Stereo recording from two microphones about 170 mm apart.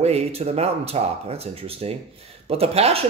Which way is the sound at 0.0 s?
35° right (ahead or behind).